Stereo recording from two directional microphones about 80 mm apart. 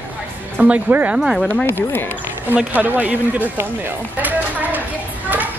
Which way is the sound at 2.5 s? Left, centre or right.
Right.